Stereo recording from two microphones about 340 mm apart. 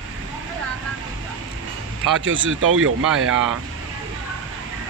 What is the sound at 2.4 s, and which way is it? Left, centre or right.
Speech, right.